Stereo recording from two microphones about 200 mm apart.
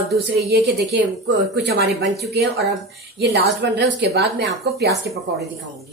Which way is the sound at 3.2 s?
55° right (ahead or behind).